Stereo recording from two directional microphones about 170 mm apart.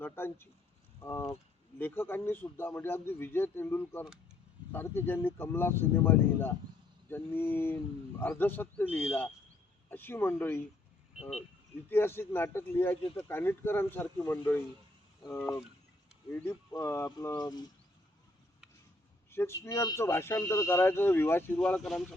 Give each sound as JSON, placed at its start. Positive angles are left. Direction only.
{"t": 0.0, "sound": "speech", "side_deg": 15}
{"t": 11.9, "sound": "speech", "side_deg": 15}
{"t": 16.3, "sound": "speech", "side_deg": 15}
{"t": 19.3, "sound": "speech", "side_deg": 15}